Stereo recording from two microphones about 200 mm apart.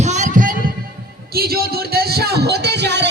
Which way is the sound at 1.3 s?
50° right (ahead or behind).